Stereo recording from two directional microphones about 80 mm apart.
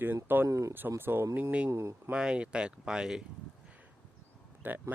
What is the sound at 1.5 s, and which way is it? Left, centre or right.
Speech, centre.